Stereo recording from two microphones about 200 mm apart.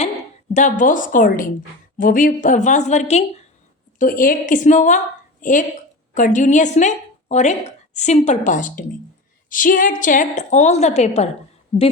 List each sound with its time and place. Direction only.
0.5 s a woman's voice: 40° left (ahead or behind)